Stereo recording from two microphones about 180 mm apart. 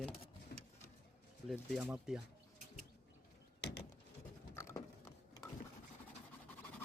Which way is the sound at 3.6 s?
70° left (ahead or behind).